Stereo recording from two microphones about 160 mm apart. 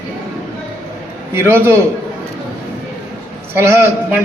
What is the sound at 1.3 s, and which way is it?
Speech, 15° right (ahead or behind).